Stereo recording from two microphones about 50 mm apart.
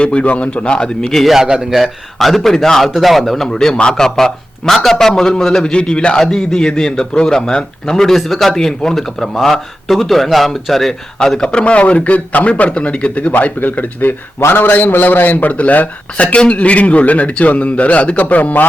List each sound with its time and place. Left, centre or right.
0.0 s a man's voice: left
1.2 s a man's voice: centre
11.3 s a man's voice: centre